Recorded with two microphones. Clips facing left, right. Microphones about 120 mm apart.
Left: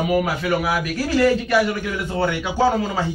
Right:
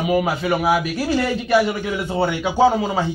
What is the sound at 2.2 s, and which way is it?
Speech, 20° right (ahead or behind).